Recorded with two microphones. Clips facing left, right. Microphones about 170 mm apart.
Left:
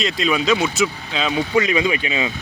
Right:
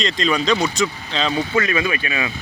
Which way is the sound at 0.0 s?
5° left (ahead or behind).